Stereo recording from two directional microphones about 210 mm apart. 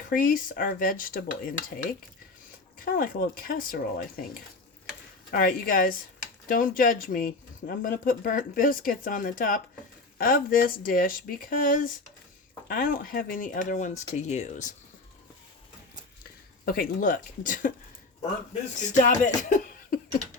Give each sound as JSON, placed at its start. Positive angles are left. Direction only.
{"t": 0.1, "sound": "speech", "side_deg": 40}
{"t": 16.6, "sound": "speech", "side_deg": 45}
{"t": 18.9, "sound": "speech", "side_deg": 35}